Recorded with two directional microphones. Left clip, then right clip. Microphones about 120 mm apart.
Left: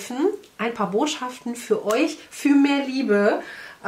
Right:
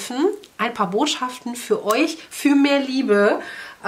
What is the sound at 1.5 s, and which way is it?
Speech, 30° right (ahead or behind).